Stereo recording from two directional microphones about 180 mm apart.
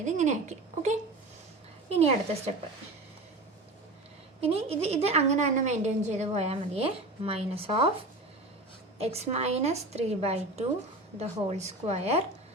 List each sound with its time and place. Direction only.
0.0 s a woman's voice: 40° right (ahead or behind)
4.4 s a woman's voice: 35° right (ahead or behind)
9.0 s a woman's voice: 35° right (ahead or behind)